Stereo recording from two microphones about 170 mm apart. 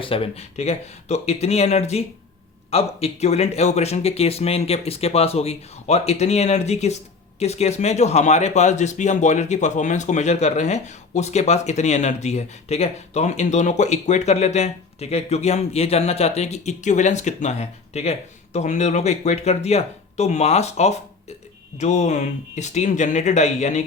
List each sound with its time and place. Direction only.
0.0 s speech: 35° left (ahead or behind)